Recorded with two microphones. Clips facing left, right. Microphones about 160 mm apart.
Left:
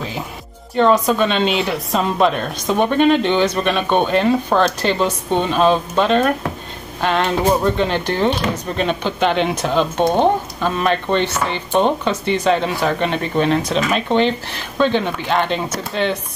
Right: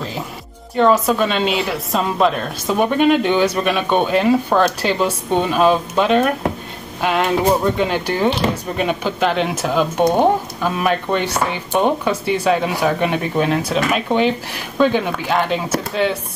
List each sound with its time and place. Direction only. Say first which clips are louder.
0.7 s speech: even; 5° right (ahead or behind)